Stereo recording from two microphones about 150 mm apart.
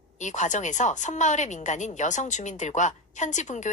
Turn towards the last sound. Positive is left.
turn(degrees=55)  # may be behind; listen again after turning